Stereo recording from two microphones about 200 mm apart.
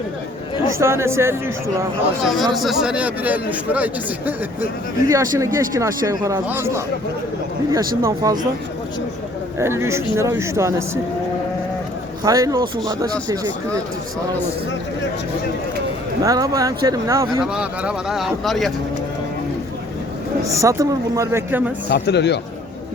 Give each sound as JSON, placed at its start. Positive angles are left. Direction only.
{"t": 0.7, "sound": "speech", "side_deg": -15}
{"t": 2.2, "sound": "speech", "side_deg": 0}
{"t": 8.0, "sound": "speech", "side_deg": -15}
{"t": 9.6, "sound": "speech", "side_deg": -15}
{"t": 12.2, "sound": "speech", "side_deg": -15}
{"t": 16.2, "sound": "speech", "side_deg": -20}
{"t": 17.4, "sound": "speech", "side_deg": -5}
{"t": 20.5, "sound": "speech", "side_deg": -15}
{"t": 21.8, "sound": "speech", "side_deg": 55}